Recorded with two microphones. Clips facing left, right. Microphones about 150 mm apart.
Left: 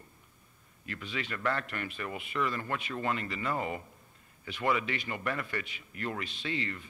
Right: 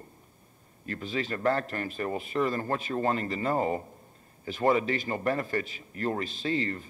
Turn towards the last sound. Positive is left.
turn(degrees=-40)  # may be behind; listen again after turning